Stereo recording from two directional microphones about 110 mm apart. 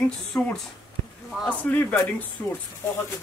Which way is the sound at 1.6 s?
15° left (ahead or behind).